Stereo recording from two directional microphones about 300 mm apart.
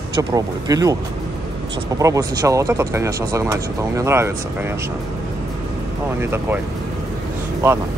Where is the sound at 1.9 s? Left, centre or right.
Centre.